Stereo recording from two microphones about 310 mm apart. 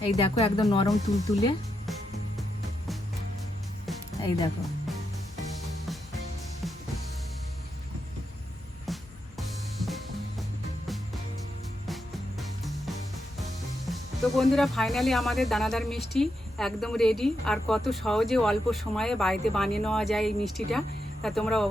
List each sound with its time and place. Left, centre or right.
0.0 s speech: centre
4.2 s speech: centre
8.9 s music: centre
12.4 s music: centre
13.4 s speech: centre